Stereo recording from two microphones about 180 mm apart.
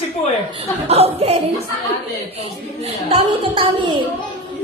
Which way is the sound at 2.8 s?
30° right (ahead or behind).